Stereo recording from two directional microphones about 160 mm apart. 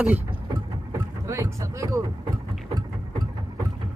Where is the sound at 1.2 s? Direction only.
20° right (ahead or behind).